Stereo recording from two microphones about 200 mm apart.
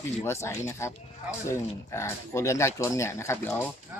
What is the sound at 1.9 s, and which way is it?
Speech, 15° left (ahead or behind).